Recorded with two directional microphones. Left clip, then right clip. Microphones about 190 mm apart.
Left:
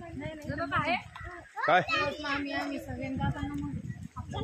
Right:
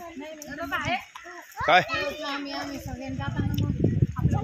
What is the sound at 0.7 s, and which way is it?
Speech, 5° right (ahead or behind).